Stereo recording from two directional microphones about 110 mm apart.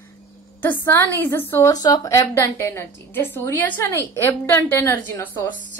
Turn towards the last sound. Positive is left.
turn(degrees=20)  # may be behind; listen again after turning